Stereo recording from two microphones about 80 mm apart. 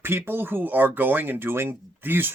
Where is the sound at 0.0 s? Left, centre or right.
Right.